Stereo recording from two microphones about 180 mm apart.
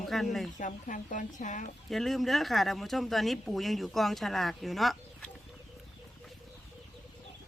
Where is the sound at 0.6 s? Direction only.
45° left (ahead or behind).